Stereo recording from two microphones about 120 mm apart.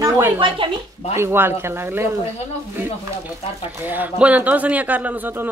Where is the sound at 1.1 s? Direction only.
20° right (ahead or behind).